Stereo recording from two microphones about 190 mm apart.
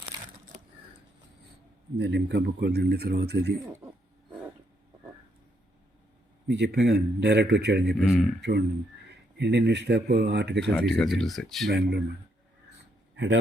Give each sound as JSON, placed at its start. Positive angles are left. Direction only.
{"t": 2.0, "sound": "speech", "side_deg": -65}
{"t": 6.5, "sound": "speech", "side_deg": -60}
{"t": 10.7, "sound": "speech", "side_deg": 5}
{"t": 11.7, "sound": "speech", "side_deg": -60}
{"t": 13.1, "sound": "a man's voice", "side_deg": -70}